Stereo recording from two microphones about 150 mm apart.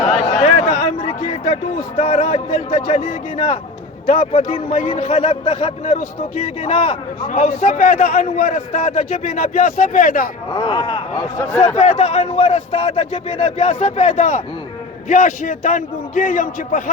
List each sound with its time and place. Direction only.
0.2 s a sound: 50° left (ahead or behind)
2.0 s speech: 45° left (ahead or behind)
4.0 s a man's voice: 60° left (ahead or behind)
6.4 s speech: 40° left (ahead or behind)
7.3 s a man's voice: 60° left (ahead or behind)
9.2 s a man's voice: 60° left (ahead or behind)
10.5 s speech: 30° left (ahead or behind)
11.8 s a man's voice: 50° left (ahead or behind); by 16.9 s 65° left (ahead or behind)